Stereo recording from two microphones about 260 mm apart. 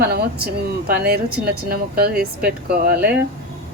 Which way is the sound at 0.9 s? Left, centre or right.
Right.